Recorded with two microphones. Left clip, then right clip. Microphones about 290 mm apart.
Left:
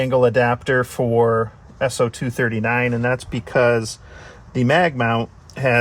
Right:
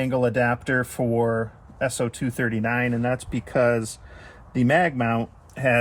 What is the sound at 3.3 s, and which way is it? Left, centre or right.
Speech, centre.